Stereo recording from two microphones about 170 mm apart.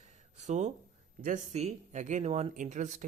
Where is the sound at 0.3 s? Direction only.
45° right (ahead or behind).